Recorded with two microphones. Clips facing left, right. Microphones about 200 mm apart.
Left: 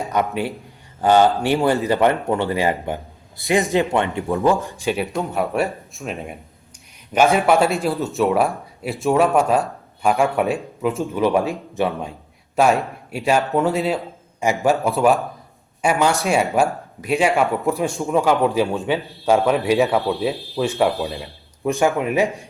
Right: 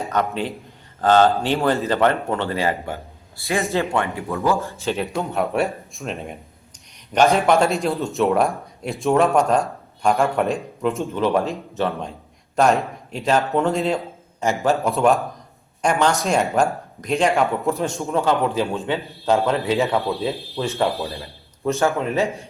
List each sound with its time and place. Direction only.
0.1 s a man's voice: 10° left (ahead or behind)
5.1 s a man's voice: centre (ahead or behind)